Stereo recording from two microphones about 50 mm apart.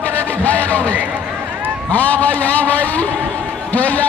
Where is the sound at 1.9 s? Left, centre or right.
Left.